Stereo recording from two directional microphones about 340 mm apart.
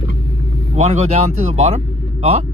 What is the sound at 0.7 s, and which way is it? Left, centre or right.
Speech, centre.